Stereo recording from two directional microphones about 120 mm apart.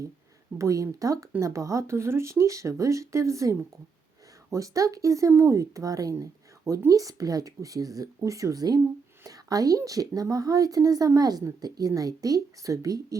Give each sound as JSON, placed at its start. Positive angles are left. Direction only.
{"t": 0.6, "sound": "speech", "side_deg": -25}